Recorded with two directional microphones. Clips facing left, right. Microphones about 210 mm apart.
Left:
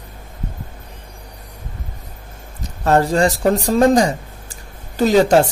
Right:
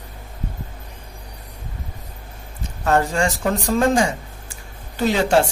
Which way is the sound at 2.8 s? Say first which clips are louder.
Left 4 dB; 35° left (ahead or behind).